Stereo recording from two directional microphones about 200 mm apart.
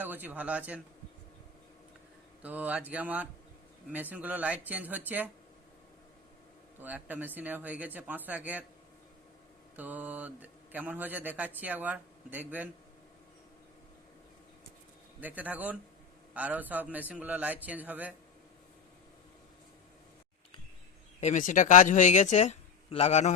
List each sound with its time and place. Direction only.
0.0 s a man's voice: 10° right (ahead or behind)
2.4 s a man's voice: 5° right (ahead or behind)
6.7 s a man's voice: 10° right (ahead or behind)
9.7 s a man's voice: 10° right (ahead or behind)
15.2 s a man's voice: 10° right (ahead or behind)
21.2 s speech: 35° left (ahead or behind)